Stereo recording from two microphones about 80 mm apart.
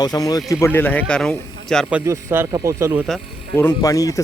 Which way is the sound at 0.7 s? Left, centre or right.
Left.